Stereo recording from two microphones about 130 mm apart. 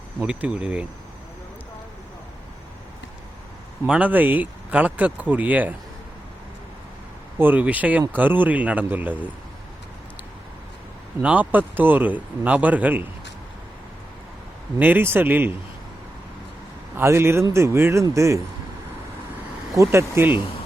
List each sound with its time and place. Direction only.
0.2 s speech: 10° right (ahead or behind)
3.8 s speech: 10° right (ahead or behind)
7.3 s speech: 15° right (ahead or behind)
11.2 s speech: 10° right (ahead or behind)
14.8 s speech: 15° right (ahead or behind)
17.0 s speech: 20° right (ahead or behind)
19.7 s speech: 20° right (ahead or behind)